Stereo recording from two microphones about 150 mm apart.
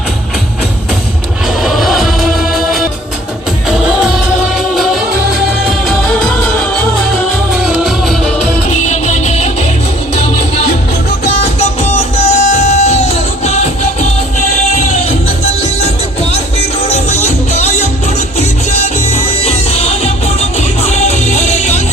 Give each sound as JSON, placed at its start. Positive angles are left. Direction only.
{"t": 1.6, "sound": "music", "side_deg": 0}
{"t": 7.6, "sound": "music", "side_deg": -5}
{"t": 8.9, "sound": "music", "side_deg": 50}
{"t": 11.8, "sound": "music", "side_deg": 45}
{"t": 16.9, "sound": "music", "side_deg": 45}